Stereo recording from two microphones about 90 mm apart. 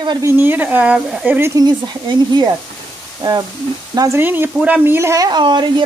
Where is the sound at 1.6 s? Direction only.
55° right (ahead or behind).